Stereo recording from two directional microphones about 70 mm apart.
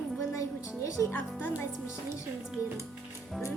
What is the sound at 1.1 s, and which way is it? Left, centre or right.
Speech, left.